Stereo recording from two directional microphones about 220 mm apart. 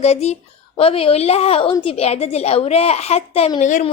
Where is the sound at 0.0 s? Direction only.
30° left (ahead or behind).